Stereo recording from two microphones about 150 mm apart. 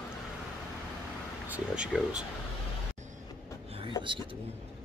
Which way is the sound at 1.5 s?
5° right (ahead or behind).